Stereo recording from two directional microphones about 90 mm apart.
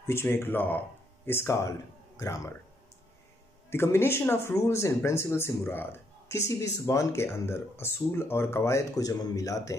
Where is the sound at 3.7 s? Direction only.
25° left (ahead or behind).